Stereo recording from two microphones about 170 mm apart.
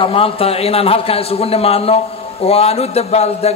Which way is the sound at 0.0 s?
35° left (ahead or behind).